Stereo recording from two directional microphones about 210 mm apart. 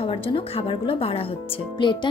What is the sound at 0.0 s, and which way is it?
Speech, 25° left (ahead or behind).